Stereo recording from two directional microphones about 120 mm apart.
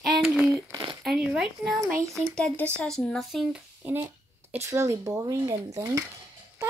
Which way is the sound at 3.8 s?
15° right (ahead or behind).